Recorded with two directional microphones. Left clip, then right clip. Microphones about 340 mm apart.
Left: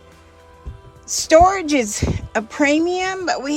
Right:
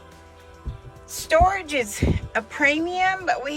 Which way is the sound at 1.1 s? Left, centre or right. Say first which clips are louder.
Left 6 dB; centre.